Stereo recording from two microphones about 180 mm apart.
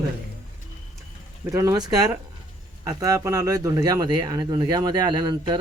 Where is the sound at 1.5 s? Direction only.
20° right (ahead or behind).